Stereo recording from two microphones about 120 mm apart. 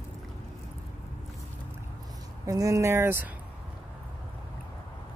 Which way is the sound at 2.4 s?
25° right (ahead or behind).